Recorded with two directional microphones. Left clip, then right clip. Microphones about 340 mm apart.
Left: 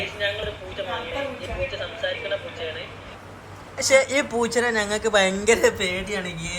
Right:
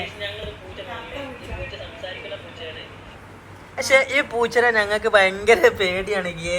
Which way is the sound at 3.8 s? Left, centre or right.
Centre.